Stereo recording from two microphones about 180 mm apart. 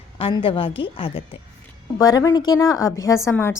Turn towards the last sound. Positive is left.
turn(degrees=15)  # may be behind; listen again after turning